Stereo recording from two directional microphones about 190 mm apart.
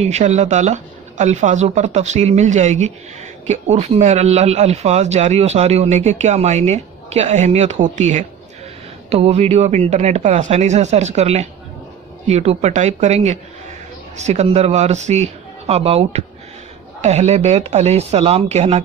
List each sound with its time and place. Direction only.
0.0 s speech: 35° right (ahead or behind)